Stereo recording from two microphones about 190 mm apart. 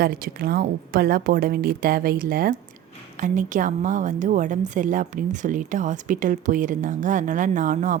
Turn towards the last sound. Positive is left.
turn(degrees=-40)  # may be behind; listen again after turning